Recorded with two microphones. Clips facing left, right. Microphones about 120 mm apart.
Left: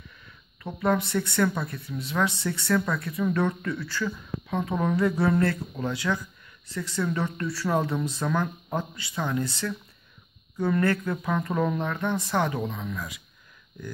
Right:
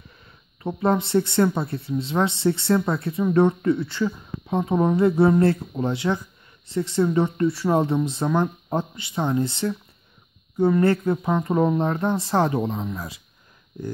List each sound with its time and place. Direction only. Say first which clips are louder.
0.7 s speech: right 3 dB; 25° right (ahead or behind)